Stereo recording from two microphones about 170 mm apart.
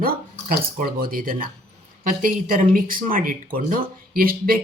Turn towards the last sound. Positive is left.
turn(degrees=-60)  # may be behind; listen again after turning